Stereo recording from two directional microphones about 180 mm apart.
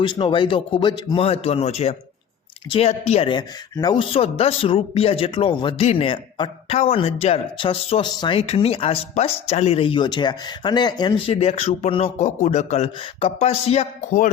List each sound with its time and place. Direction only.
0.0 s speech: 25° left (ahead or behind)